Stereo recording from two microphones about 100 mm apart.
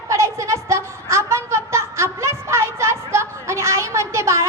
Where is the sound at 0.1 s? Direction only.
30° right (ahead or behind).